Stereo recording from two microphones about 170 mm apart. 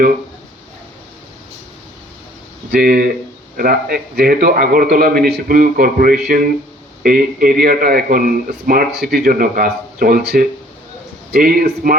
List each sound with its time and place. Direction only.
2.7 s speech: 65° right (ahead or behind)